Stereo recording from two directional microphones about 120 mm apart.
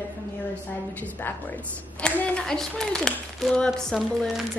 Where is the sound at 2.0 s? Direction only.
5° left (ahead or behind).